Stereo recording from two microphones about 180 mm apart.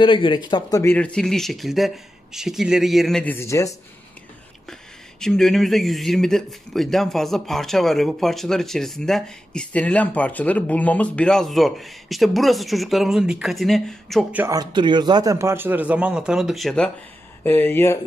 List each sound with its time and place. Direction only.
0.0 s speech: 25° left (ahead or behind)
0.9 s speech: 5° left (ahead or behind)
5.2 s speech: centre (ahead or behind)
14.4 s a man's voice: 20° right (ahead or behind); by 17.9 s 10° left (ahead or behind)